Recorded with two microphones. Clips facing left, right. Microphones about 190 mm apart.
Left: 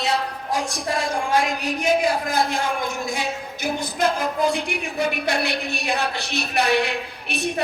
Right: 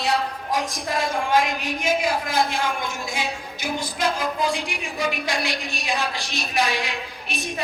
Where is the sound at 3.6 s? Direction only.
55° left (ahead or behind).